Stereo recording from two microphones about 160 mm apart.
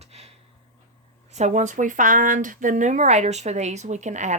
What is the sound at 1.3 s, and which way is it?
Speech, 45° right (ahead or behind).